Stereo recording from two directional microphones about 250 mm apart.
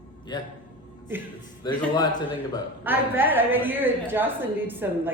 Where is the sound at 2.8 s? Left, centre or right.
Centre.